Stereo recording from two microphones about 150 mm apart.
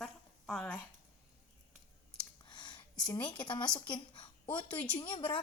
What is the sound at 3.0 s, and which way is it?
A woman's voice, 25° left (ahead or behind).